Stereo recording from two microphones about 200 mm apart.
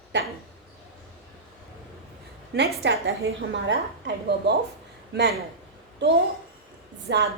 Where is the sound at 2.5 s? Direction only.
65° right (ahead or behind).